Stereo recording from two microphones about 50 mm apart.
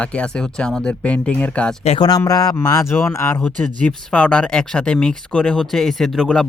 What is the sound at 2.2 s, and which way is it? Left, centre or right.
Speech, left.